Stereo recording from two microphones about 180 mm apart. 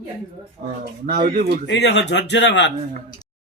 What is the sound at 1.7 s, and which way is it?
Speech, 75° left (ahead or behind).